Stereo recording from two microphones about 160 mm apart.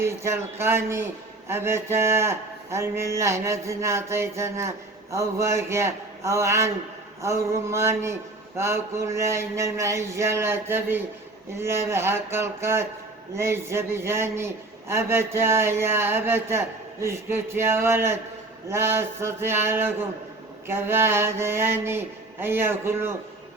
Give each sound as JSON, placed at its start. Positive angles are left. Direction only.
{"t": 0.0, "sound": "speech", "side_deg": -15}